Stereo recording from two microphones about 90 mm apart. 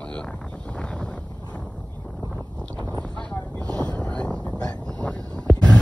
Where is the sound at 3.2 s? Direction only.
15° left (ahead or behind).